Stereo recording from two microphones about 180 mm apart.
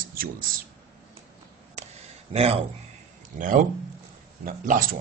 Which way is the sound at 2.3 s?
35° right (ahead or behind).